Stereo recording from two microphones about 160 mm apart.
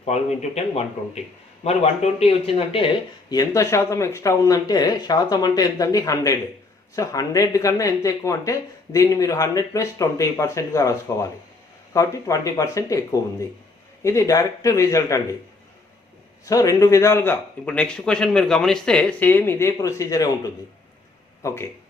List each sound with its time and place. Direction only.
0.0 s speech: 45° left (ahead or behind)
3.3 s speech: 20° left (ahead or behind)
16.5 s a man's voice: 20° left (ahead or behind)